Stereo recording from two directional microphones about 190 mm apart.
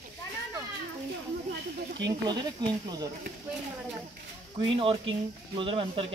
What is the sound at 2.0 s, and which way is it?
Speech, 20° right (ahead or behind).